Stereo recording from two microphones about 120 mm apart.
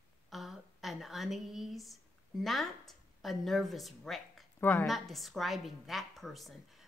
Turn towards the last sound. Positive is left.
turn(degrees=0)  # may be behind; listen again after turning